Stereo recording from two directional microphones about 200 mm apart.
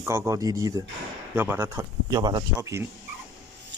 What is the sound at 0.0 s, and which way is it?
Speech, 15° right (ahead or behind).